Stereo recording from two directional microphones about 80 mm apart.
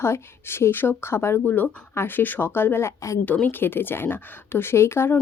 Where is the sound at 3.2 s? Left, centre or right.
Left.